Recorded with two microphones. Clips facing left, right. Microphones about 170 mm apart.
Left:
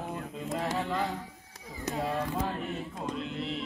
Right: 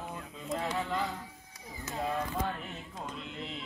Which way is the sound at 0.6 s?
40° left (ahead or behind).